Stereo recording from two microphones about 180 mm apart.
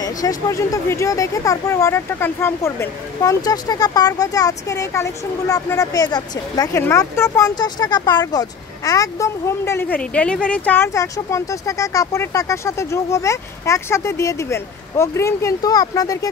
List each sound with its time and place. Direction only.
0.0 s speech: 20° left (ahead or behind)